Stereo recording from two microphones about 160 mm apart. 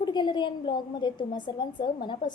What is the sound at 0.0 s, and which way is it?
A woman's voice, 30° left (ahead or behind).